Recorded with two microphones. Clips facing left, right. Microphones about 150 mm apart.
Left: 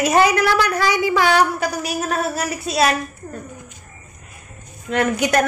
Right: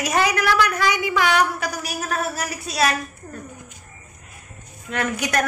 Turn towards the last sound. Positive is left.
turn(degrees=25)  # may be behind; listen again after turning